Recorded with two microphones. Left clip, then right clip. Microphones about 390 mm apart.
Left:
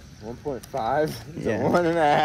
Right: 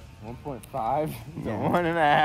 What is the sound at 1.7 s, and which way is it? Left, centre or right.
Speech, centre.